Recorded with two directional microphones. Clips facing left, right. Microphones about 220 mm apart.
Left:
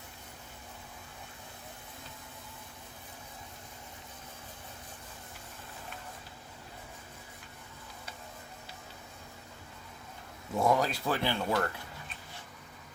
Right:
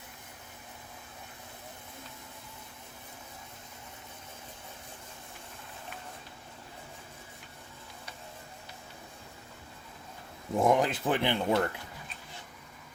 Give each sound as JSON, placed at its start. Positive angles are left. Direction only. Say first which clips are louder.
{"t": 10.5, "sound": "speech", "louder": "right 2 dB", "side_deg": -15}